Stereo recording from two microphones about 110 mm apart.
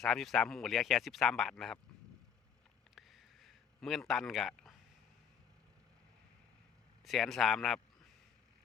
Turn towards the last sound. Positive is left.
turn(degrees=0)  # may be behind; listen again after turning